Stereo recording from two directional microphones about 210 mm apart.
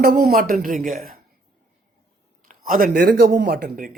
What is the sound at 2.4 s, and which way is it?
Speech, 40° right (ahead or behind).